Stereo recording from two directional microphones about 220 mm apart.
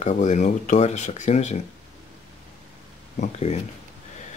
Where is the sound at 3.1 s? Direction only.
30° left (ahead or behind).